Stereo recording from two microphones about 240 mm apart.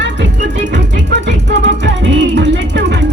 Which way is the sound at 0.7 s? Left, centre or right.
Right.